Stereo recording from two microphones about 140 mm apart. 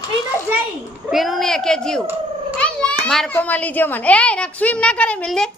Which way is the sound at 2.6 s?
10° left (ahead or behind).